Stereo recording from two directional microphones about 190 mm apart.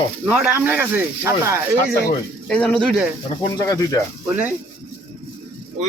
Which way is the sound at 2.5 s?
5° left (ahead or behind).